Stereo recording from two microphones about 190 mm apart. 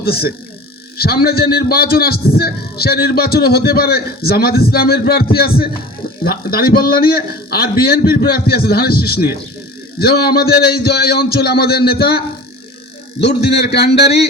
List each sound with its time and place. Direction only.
0.0 s a man's voice: 55° left (ahead or behind)